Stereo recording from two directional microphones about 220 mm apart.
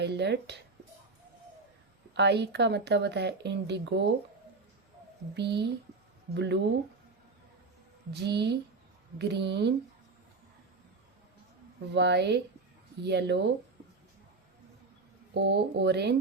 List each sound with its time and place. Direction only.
0.0 s speech: 50° right (ahead or behind)
2.1 s speech: 50° right (ahead or behind)
5.3 s speech: 50° right (ahead or behind)
8.1 s speech: 50° right (ahead or behind)
11.9 s speech: 50° right (ahead or behind)
15.4 s speech: 50° right (ahead or behind)